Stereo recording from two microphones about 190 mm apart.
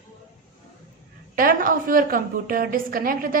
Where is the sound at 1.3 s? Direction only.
50° right (ahead or behind).